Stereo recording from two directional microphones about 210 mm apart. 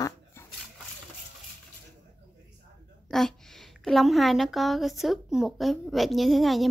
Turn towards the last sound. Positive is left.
turn(degrees=0)  # may be behind; listen again after turning